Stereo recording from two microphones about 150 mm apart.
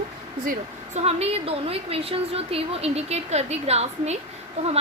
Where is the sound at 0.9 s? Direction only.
45° right (ahead or behind).